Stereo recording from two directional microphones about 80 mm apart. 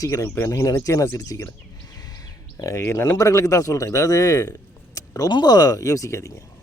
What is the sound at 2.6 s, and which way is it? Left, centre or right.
Speech, left.